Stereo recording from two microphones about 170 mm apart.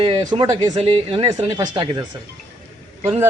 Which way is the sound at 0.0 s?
25° right (ahead or behind).